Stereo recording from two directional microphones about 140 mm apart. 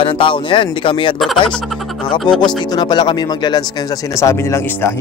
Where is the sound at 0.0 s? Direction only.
40° left (ahead or behind).